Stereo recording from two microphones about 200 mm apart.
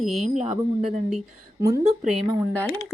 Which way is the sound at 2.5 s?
10° left (ahead or behind).